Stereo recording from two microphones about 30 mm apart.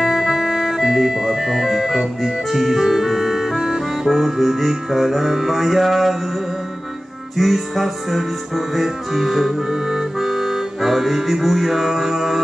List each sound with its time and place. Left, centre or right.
0.0 s music: centre
3.6 s accordion: centre
4.1 s music: centre
7.3 s music: centre